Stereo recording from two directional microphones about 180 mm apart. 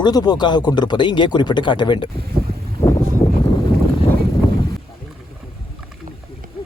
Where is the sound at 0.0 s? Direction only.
20° left (ahead or behind).